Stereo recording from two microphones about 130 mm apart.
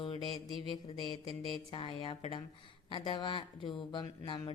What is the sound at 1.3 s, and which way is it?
A woman's voice, 45° left (ahead or behind).